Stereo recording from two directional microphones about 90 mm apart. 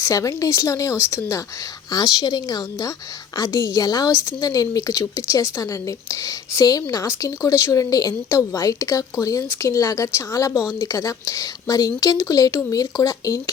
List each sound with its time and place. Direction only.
0.0 s a woman's voice: 40° left (ahead or behind)
1.9 s a woman's voice: 45° left (ahead or behind)